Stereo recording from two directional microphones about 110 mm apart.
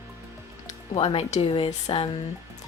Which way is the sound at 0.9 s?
55° left (ahead or behind).